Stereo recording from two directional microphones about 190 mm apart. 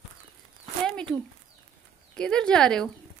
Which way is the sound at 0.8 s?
5° left (ahead or behind).